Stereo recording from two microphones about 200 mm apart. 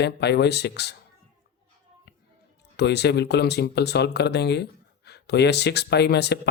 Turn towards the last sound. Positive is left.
turn(degrees=55)  # may be behind; listen again after turning